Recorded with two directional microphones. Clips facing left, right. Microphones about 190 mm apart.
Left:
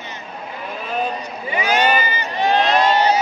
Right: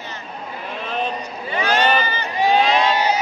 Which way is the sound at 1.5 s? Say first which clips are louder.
Left 1 dB; 10° left (ahead or behind).